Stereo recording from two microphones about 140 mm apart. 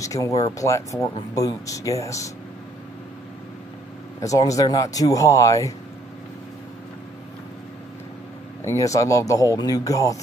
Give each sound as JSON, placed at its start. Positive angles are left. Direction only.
{"t": 0.0, "sound": "a sound", "side_deg": 25}
{"t": 0.4, "sound": "speech", "side_deg": 25}
{"t": 4.2, "sound": "speech", "side_deg": 25}
{"t": 8.6, "sound": "speech", "side_deg": 25}